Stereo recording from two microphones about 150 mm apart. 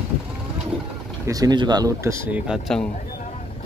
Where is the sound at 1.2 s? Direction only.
25° right (ahead or behind).